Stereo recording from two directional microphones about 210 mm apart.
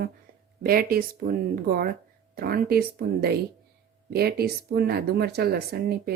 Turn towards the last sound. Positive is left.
turn(degrees=-50)  # may be behind; listen again after turning